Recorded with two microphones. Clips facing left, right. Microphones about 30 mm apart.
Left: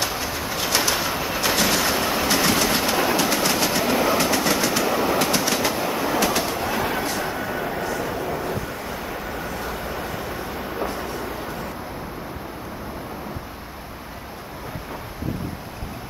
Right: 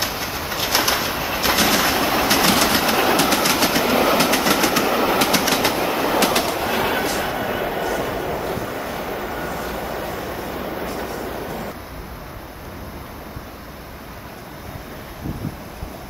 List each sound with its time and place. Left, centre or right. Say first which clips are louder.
0.0 s bird: right 1 dB; centre
1.5 s train: right 4 dB; right
2.4 s train: right 3 dB; right
2.8 s train: right 3 dB; right
3.1 s train: right 3 dB; right
8.6 s vehicle: right 4 dB; right
9.1 s vehicle: right 3 dB; right